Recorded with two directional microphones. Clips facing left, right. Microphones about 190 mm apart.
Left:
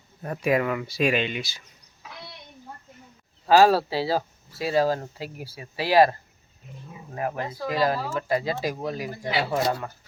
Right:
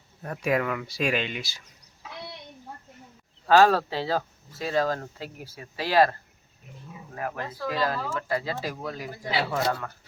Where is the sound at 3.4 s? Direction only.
10° left (ahead or behind).